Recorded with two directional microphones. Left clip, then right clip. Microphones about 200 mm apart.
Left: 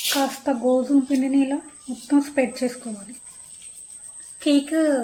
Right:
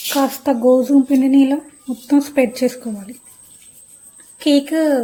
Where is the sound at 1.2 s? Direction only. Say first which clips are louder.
Right 8 dB; 50° right (ahead or behind).